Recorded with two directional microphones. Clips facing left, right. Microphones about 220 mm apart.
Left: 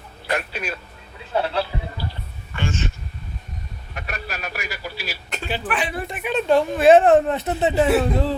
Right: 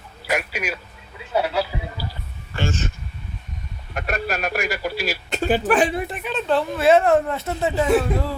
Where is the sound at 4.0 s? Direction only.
50° right (ahead or behind).